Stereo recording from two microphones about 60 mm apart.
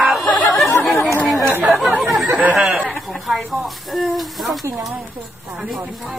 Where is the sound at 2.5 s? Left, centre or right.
Centre.